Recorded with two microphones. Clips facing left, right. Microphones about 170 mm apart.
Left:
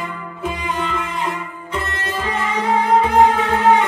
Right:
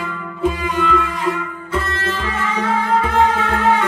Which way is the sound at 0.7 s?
20° left (ahead or behind).